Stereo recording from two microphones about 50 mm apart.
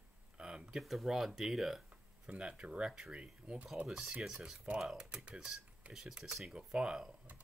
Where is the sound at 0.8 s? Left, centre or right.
Centre.